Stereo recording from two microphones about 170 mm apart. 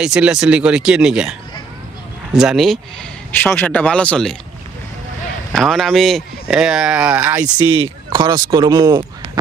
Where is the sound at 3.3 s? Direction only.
10° left (ahead or behind).